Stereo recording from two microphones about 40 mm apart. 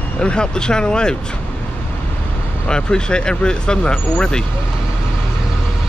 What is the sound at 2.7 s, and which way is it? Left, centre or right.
Speech, left.